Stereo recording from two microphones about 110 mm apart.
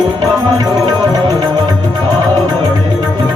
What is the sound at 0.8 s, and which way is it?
Music, 40° right (ahead or behind).